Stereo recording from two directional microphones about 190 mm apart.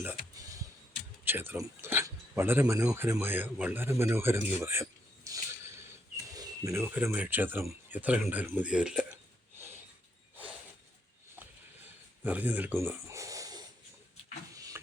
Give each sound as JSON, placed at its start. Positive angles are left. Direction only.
{"t": 0.0, "sound": "music", "side_deg": -10}
{"t": 1.2, "sound": "speech", "side_deg": -10}
{"t": 12.2, "sound": "a sound", "side_deg": -10}